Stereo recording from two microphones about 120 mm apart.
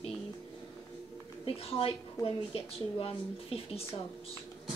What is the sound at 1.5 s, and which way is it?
A woman's voice, 55° left (ahead or behind).